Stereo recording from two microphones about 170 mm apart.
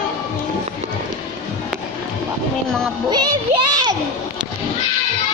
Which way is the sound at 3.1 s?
25° right (ahead or behind).